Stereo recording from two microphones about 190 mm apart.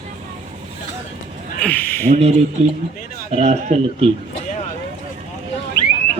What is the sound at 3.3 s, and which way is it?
Speech, 35° right (ahead or behind).